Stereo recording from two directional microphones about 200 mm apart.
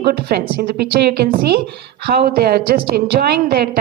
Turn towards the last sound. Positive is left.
turn(degrees=-50)  # may be behind; listen again after turning